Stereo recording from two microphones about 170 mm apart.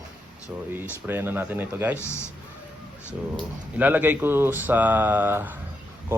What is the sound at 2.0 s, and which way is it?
Speech, 15° left (ahead or behind).